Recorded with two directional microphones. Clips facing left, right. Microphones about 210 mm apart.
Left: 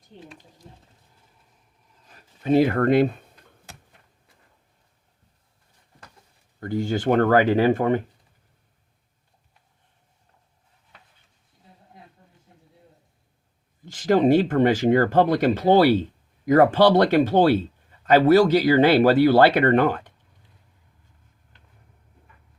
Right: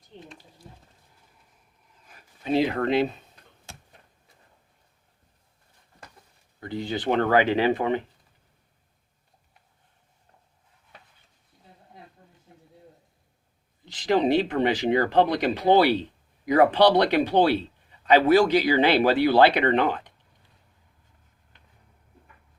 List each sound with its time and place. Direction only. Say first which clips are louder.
2.0 s speech: left 5 dB; 40° left (ahead or behind)
6.6 s a man's voice: left 5 dB; 45° left (ahead or behind)
13.8 s a man's voice: left 4 dB; 45° left (ahead or behind)